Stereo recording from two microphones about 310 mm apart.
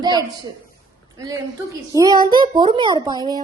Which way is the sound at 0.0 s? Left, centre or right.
Centre.